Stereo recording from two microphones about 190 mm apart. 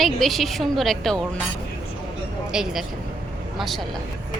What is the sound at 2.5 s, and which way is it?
Speech, 5° right (ahead or behind).